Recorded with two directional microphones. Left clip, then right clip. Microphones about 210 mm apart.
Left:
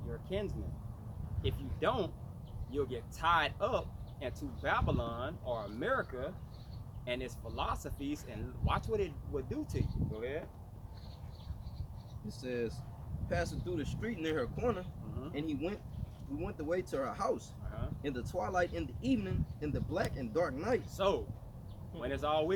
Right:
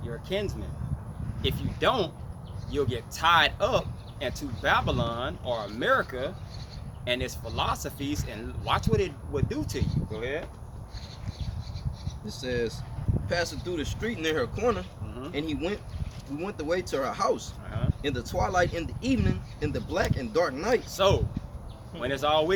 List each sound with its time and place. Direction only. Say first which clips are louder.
0.1 s speech: right 8 dB; 20° right (ahead or behind)
12.3 s speech: right 8 dB; 10° right (ahead or behind)
20.9 s speech: right 9 dB; 20° right (ahead or behind)